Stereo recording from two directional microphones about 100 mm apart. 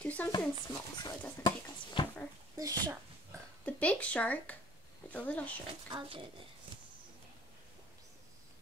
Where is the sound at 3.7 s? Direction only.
15° left (ahead or behind).